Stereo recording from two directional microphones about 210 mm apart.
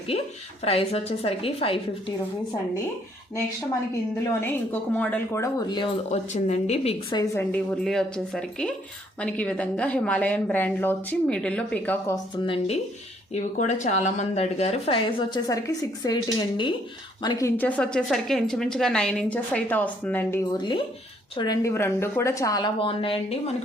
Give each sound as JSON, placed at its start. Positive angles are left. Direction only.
{"t": 0.6, "sound": "speech", "side_deg": 30}
{"t": 4.4, "sound": "speech", "side_deg": 10}
{"t": 7.2, "sound": "a woman's voice", "side_deg": 10}
{"t": 12.4, "sound": "a woman's voice", "side_deg": 25}